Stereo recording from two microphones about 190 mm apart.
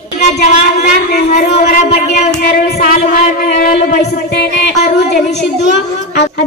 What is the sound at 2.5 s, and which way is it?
Child singing, 50° left (ahead or behind).